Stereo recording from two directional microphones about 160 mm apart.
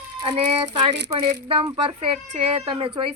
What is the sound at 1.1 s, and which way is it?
A woman's voice, 35° right (ahead or behind).